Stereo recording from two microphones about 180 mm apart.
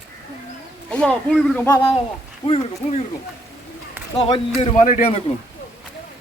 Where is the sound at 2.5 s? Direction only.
30° left (ahead or behind).